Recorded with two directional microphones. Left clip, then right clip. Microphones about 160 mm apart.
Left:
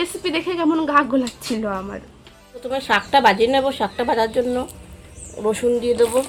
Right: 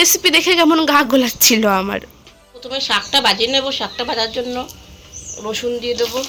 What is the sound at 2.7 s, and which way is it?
Speech, 60° left (ahead or behind).